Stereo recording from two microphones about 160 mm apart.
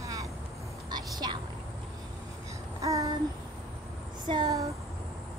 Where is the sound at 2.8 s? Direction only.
20° right (ahead or behind).